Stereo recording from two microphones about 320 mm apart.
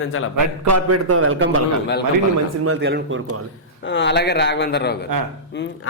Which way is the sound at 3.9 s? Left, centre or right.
Left.